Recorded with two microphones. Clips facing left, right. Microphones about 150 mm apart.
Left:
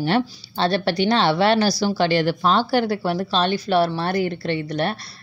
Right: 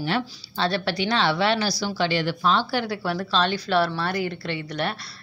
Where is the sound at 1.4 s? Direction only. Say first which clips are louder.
Left 5 dB; 45° left (ahead or behind).